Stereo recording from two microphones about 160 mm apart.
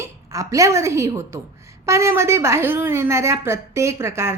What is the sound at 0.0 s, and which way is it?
A woman's voice, 20° right (ahead or behind).